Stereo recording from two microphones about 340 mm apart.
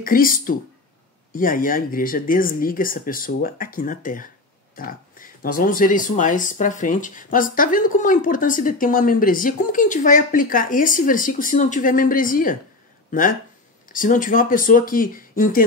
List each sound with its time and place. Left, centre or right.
0.0 s speech: left
13.8 s speech: left